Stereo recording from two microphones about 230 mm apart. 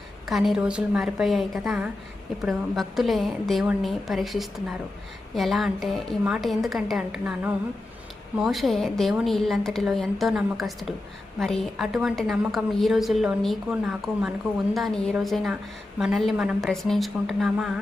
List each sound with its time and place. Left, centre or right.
0.3 s a woman's voice: centre